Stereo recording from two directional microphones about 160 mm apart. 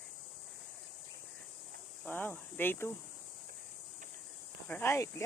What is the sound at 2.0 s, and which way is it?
Cricket, 10° left (ahead or behind).